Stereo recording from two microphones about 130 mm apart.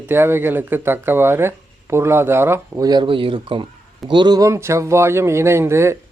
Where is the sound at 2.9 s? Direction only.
40° right (ahead or behind); by 5.9 s 20° right (ahead or behind).